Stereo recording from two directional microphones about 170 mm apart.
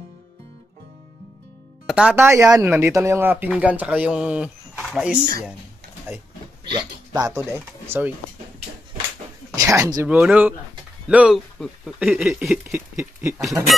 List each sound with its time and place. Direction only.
1.9 s speech: 5° right (ahead or behind)
6.7 s speech: 20° right (ahead or behind)
9.6 s speech: 20° right (ahead or behind)
10.0 s speech: 5° right (ahead or behind)
12.7 s a sound: 15° right (ahead or behind)